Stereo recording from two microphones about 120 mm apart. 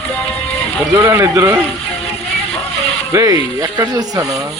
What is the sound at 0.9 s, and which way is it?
Speech, 30° right (ahead or behind).